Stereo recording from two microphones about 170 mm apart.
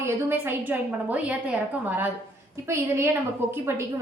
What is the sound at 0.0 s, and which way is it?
A woman's voice, 10° right (ahead or behind).